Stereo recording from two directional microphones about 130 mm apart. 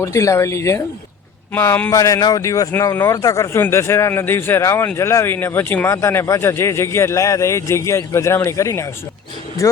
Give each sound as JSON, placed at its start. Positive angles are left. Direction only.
{"t": 0.0, "sound": "a man's voice", "side_deg": 25}